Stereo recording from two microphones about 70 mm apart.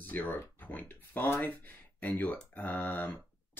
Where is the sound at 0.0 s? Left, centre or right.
Left.